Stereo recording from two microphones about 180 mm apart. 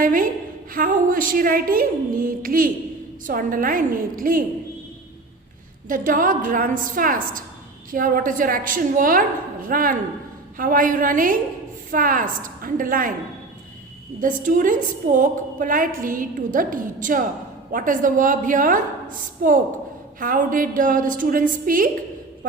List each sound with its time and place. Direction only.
0.0 s a woman's voice: 50° right (ahead or behind)
5.9 s a woman's voice: 45° right (ahead or behind)
14.2 s a woman's voice: 45° right (ahead or behind)